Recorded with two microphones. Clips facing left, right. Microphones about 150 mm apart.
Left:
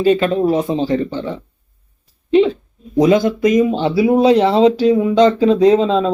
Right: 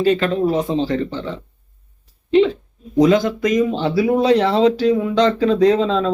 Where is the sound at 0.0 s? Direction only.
15° left (ahead or behind).